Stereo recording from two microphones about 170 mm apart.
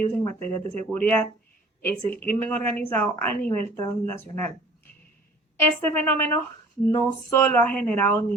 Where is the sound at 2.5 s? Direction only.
10° left (ahead or behind).